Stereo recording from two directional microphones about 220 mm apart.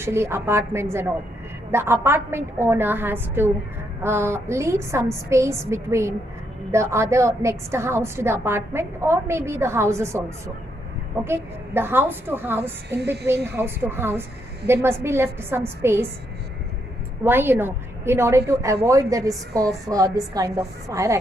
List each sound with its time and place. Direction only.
0.0 s a woman's voice: 10° right (ahead or behind)
17.2 s a woman's voice: 10° right (ahead or behind)